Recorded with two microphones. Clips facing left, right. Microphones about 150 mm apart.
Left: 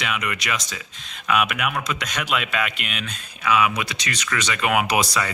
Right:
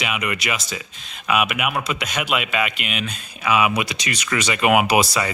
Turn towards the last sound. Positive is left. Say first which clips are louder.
# right 3 dB
turn(degrees=-5)  # may be behind; listen again after turning